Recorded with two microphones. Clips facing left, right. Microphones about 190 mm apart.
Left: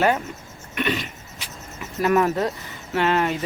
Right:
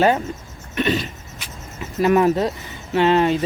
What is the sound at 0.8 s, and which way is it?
Speech, 35° right (ahead or behind).